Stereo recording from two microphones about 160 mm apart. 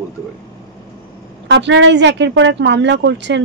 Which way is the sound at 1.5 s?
90° right.